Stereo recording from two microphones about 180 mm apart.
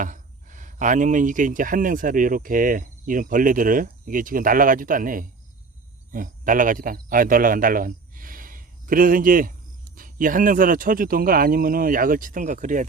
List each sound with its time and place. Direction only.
0.0 s speech: 45° right (ahead or behind)